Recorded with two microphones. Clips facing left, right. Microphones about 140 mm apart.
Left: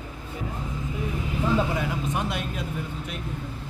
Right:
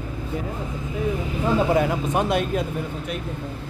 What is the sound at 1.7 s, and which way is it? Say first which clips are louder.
Speech: right 7 dB; 50° right (ahead or behind).